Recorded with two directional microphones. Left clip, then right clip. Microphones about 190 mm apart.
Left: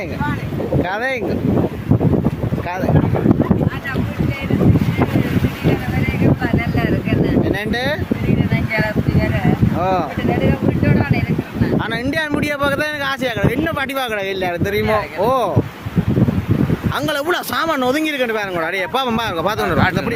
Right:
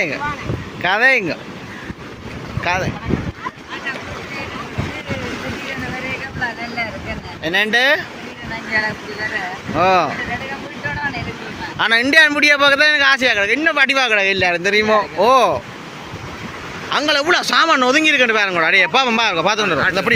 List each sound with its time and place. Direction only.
0.9 s speech: 10° left (ahead or behind)
7.4 s speech: 5° left (ahead or behind)
9.7 s speech: 5° left (ahead or behind)
11.8 s speech: 5° left (ahead or behind)
16.9 s speech: 20° left (ahead or behind)